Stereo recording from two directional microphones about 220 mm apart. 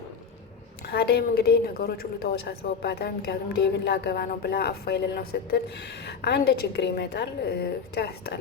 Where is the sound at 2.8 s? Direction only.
50° left (ahead or behind).